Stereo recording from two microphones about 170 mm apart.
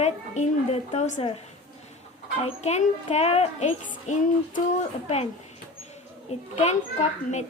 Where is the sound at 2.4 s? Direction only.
40° left (ahead or behind).